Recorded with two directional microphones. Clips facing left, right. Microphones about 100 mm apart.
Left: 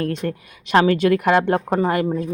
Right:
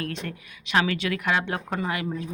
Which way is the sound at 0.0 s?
45° left (ahead or behind).